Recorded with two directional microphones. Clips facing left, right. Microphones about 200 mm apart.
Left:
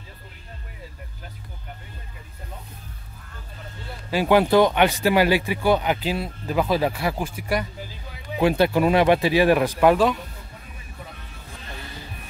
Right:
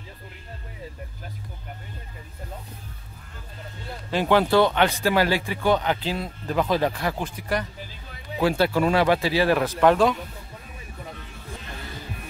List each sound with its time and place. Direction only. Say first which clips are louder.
4.1 s speech: left 2 dB; 10° left (ahead or behind)